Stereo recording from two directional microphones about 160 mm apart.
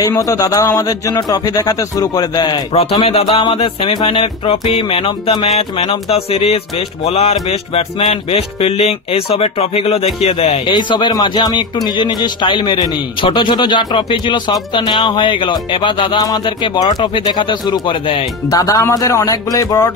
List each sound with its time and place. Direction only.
0.0 s speech: 20° left (ahead or behind)
2.7 s music: 40° left (ahead or behind)
10.7 s speech: 30° left (ahead or behind)
18.5 s speech: 20° left (ahead or behind)